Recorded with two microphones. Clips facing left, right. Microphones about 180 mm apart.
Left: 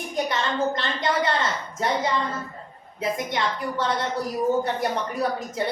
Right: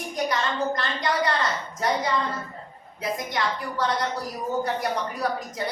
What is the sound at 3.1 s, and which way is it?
Speech, 25° left (ahead or behind).